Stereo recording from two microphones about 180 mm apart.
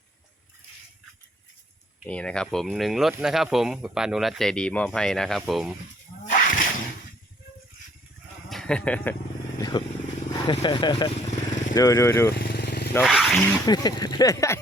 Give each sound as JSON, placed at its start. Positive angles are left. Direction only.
{"t": 2.0, "sound": "speech", "side_deg": 5}
{"t": 6.2, "sound": "splash", "side_deg": 50}
{"t": 8.4, "sound": "speech", "side_deg": 5}
{"t": 9.6, "sound": "vehicle", "side_deg": 25}
{"t": 10.3, "sound": "speech", "side_deg": 25}
{"t": 12.3, "sound": "vehicle", "side_deg": 60}
{"t": 13.0, "sound": "speech", "side_deg": 0}
{"t": 13.7, "sound": "speech", "side_deg": 20}